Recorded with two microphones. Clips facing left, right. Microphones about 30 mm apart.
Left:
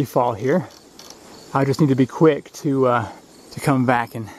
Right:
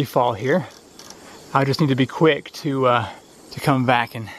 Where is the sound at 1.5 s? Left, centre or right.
Right.